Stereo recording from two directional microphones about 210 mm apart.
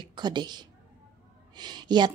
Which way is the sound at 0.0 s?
20° right (ahead or behind).